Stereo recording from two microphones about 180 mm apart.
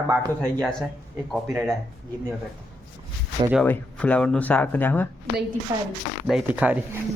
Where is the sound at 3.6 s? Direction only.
10° left (ahead or behind).